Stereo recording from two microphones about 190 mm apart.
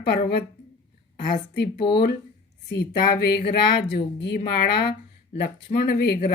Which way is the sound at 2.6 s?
55° left (ahead or behind).